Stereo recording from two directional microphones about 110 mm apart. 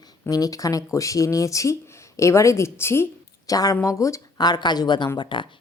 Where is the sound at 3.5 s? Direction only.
35° left (ahead or behind).